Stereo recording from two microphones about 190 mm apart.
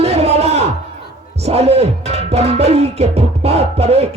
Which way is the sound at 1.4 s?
35° right (ahead or behind).